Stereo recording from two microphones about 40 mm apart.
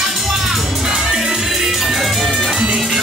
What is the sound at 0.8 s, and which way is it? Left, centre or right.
Music, centre.